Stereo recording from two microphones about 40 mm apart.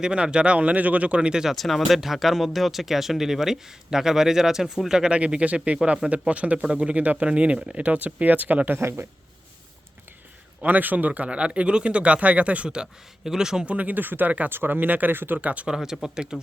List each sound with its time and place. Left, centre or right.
0.0 s speech: right
1.5 s speech: centre
5.1 s speech: right
7.9 s speech: right
8.8 s a man's voice: right
10.7 s speech: right
11.3 s speech: right
12.7 s speech: centre
13.7 s speech: right
14.5 s speech: right
14.8 s speech: right
15.1 s speech: right
15.4 s speech: right
15.6 s speech: centre